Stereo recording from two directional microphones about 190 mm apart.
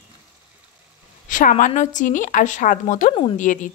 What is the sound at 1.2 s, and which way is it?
A woman's voice, 40° left (ahead or behind).